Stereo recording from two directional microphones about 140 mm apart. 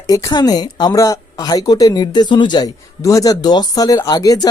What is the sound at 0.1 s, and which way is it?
Speech, 25° left (ahead or behind).